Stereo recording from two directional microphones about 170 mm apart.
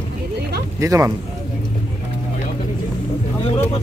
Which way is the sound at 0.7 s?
20° right (ahead or behind).